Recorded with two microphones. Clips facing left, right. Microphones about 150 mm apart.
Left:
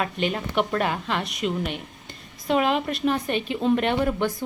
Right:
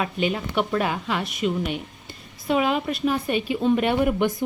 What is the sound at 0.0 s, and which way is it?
A woman's voice, 5° right (ahead or behind).